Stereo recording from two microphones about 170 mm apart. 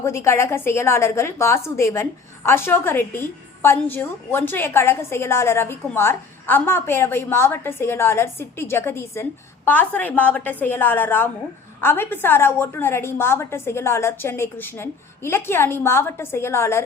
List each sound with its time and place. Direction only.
0.0 s a woman's voice: 15° left (ahead or behind)